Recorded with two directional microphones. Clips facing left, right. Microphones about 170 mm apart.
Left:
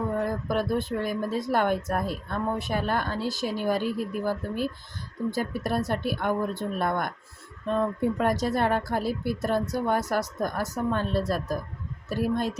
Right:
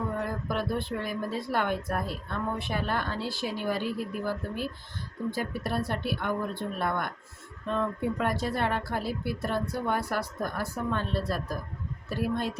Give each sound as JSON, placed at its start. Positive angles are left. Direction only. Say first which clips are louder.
{"t": 0.4, "sound": "speech", "louder": "left 4 dB", "side_deg": 40}